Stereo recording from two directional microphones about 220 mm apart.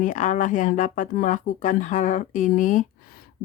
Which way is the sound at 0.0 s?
35° left (ahead or behind).